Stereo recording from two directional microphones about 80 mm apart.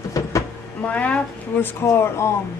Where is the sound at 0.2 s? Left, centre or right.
Left.